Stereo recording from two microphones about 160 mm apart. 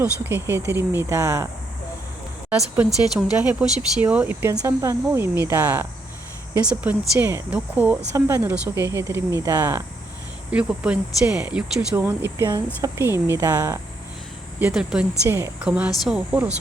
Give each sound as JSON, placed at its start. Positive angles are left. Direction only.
{"t": 0.0, "sound": "speech", "side_deg": -15}
{"t": 2.5, "sound": "speech", "side_deg": -10}
{"t": 10.5, "sound": "speech", "side_deg": -5}
{"t": 14.6, "sound": "speech", "side_deg": -5}
{"t": 15.3, "sound": "speech", "side_deg": -15}